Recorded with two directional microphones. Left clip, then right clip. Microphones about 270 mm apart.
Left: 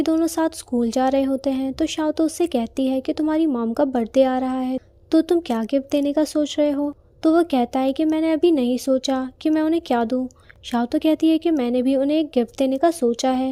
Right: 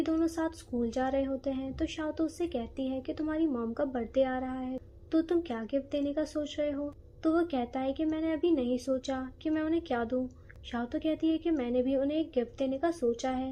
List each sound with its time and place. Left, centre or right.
0.0 s speech: left